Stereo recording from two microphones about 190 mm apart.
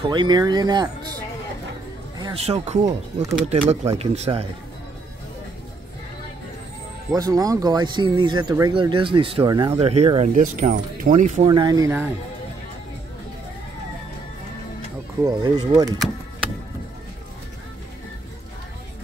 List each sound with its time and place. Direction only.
0.1 s speech: 20° right (ahead or behind)
2.1 s music: 20° right (ahead or behind)
2.6 s speech: 35° right (ahead or behind)
7.1 s speech: 20° right (ahead or behind); by 11.4 s 40° right (ahead or behind)
11.4 s speech: 25° right (ahead or behind)
15.2 s speech: 20° right (ahead or behind)